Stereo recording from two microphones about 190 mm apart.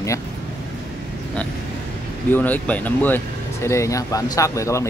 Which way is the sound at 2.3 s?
10° left (ahead or behind).